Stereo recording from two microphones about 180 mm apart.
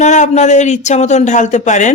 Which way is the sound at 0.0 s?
40° left (ahead or behind).